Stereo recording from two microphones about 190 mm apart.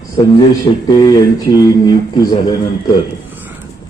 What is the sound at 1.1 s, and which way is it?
Speech, 20° left (ahead or behind).